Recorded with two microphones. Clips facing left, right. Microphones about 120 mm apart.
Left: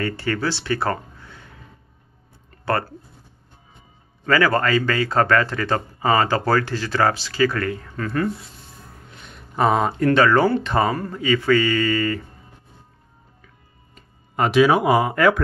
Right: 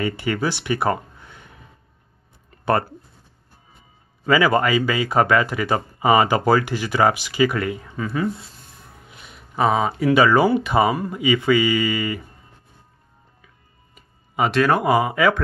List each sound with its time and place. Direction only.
0.0 s speech: 15° right (ahead or behind)
2.5 s a sound: 20° right (ahead or behind)
4.3 s speech: 15° right (ahead or behind)
13.9 s music: 5° right (ahead or behind)
14.5 s speech: 5° left (ahead or behind)